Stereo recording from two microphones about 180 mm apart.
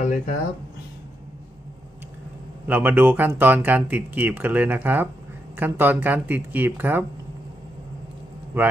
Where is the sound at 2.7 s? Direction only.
10° right (ahead or behind).